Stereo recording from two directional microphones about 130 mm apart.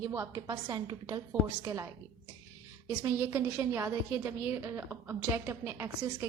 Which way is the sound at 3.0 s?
15° right (ahead or behind).